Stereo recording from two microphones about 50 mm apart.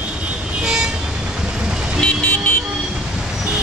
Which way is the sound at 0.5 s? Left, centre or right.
Centre.